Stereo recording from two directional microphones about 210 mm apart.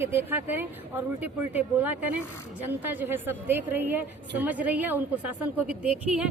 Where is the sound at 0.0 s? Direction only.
10° right (ahead or behind).